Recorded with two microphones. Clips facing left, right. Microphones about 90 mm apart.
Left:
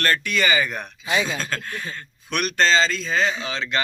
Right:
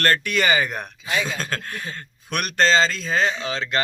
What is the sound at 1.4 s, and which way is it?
Speech, 45° right (ahead or behind).